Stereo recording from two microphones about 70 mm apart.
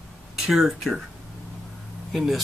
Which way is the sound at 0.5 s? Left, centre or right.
Centre.